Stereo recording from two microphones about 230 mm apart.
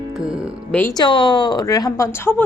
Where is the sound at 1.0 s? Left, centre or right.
Centre.